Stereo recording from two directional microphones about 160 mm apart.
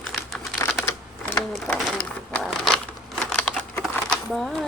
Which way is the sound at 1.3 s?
10° left (ahead or behind).